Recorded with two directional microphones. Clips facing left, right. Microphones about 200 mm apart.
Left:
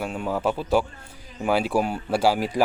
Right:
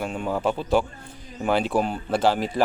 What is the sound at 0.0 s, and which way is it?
Speech, 5° left (ahead or behind).